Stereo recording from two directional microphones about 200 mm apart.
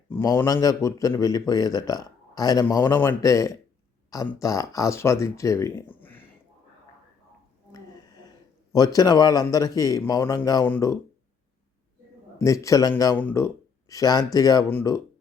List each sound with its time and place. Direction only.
0.1 s speech: 15° left (ahead or behind)
7.7 s a sound: 20° left (ahead or behind)
8.7 s speech: 20° left (ahead or behind)
12.4 s speech: 15° left (ahead or behind)